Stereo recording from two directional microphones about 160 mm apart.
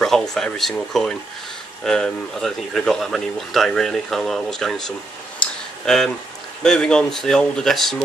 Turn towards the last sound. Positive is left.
turn(degrees=0)  # may be behind; listen again after turning